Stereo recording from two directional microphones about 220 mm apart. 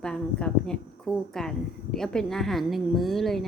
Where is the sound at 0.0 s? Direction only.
5° left (ahead or behind).